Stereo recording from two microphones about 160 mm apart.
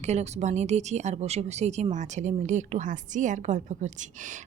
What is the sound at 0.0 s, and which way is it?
Speech, 45° right (ahead or behind).